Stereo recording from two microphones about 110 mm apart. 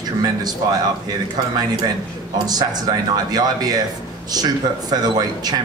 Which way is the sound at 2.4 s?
35° right (ahead or behind).